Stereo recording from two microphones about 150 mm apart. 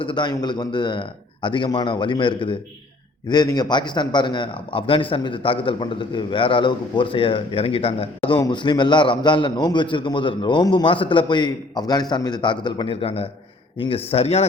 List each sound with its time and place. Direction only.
0.0 s a man's voice: 30° left (ahead or behind)
8.4 s a man's voice: 30° left (ahead or behind)